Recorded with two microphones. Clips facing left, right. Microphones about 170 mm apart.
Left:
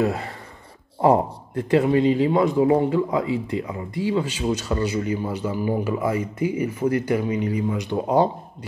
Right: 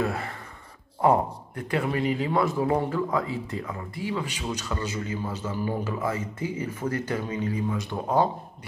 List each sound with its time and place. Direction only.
0.0 s speech: 20° left (ahead or behind)